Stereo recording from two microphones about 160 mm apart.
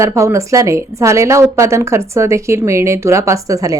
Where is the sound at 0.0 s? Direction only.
20° right (ahead or behind).